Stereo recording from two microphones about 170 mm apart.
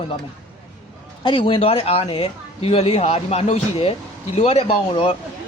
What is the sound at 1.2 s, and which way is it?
Speech, 30° left (ahead or behind).